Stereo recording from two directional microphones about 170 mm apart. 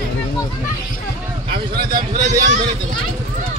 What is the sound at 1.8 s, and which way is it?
Speech, 60° right (ahead or behind).